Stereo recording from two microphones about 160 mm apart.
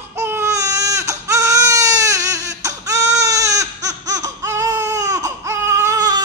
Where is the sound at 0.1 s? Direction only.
15° right (ahead or behind).